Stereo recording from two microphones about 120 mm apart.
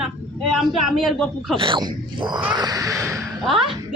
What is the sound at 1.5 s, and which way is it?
Speech, 40° right (ahead or behind).